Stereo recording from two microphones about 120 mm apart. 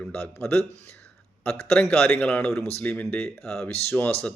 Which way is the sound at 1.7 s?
5° left (ahead or behind).